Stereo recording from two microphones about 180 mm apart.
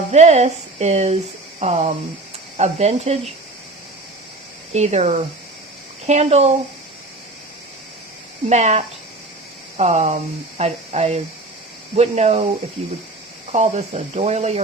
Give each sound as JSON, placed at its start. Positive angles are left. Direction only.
{"t": 0.1, "sound": "speech", "side_deg": -40}
{"t": 4.7, "sound": "speech", "side_deg": -40}
{"t": 8.4, "sound": "speech", "side_deg": -40}
{"t": 13.5, "sound": "speech", "side_deg": -35}